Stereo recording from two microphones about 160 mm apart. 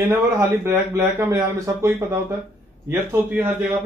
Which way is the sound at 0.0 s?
15° right (ahead or behind).